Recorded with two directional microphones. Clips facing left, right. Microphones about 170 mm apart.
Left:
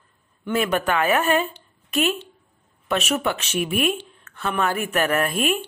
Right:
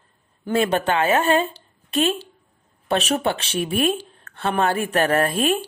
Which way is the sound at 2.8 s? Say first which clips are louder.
Right 2 dB; 35° right (ahead or behind).